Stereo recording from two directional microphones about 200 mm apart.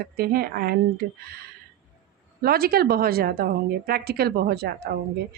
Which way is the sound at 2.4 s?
50° right (ahead or behind).